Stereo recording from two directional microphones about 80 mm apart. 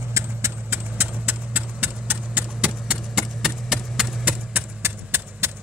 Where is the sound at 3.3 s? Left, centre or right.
Centre.